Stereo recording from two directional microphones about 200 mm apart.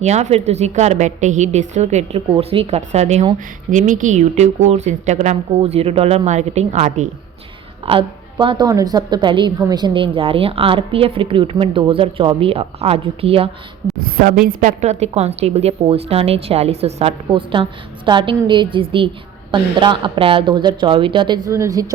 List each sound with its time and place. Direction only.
0.0 s a woman's voice: 35° right (ahead or behind)
7.9 s a woman's voice: 25° right (ahead or behind)
14.4 s a woman's voice: 40° right (ahead or behind); by 21.9 s 20° right (ahead or behind)